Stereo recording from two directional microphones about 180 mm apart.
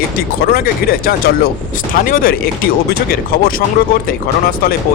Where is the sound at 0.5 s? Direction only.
55° left (ahead or behind).